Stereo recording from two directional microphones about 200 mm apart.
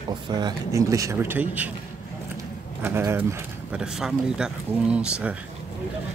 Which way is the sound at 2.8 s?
10° right (ahead or behind).